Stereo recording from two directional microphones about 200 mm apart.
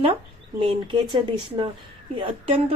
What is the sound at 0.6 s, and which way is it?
A woman's voice, 25° right (ahead or behind).